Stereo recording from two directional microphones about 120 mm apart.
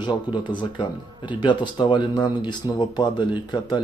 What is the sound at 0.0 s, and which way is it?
Speech, 40° left (ahead or behind).